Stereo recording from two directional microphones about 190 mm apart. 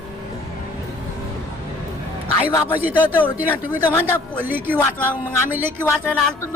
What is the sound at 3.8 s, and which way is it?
Speech, 15° left (ahead or behind).